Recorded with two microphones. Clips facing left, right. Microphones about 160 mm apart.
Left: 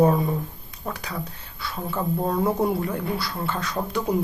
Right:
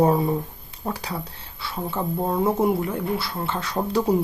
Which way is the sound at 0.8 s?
30° right (ahead or behind).